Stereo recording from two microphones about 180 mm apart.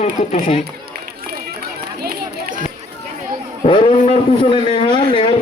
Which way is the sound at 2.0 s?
55° right (ahead or behind).